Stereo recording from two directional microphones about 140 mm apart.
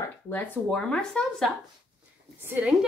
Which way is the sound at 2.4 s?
15° right (ahead or behind).